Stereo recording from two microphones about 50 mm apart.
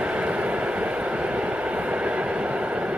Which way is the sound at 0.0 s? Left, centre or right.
Right.